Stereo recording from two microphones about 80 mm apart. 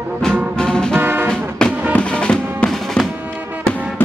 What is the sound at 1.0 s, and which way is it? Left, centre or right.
Music, right.